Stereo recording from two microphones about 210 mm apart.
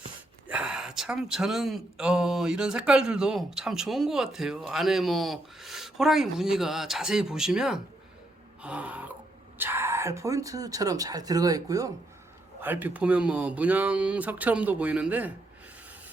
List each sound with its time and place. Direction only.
0.4 s speech: 5° right (ahead or behind)
8.6 s a sound: 5° right (ahead or behind)
9.6 s speech: 10° right (ahead or behind)